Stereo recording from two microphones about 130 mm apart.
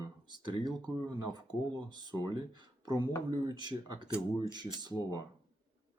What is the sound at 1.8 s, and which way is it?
Speech, 35° right (ahead or behind).